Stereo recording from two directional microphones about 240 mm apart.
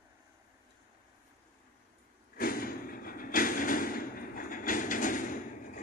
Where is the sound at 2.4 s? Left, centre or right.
Left.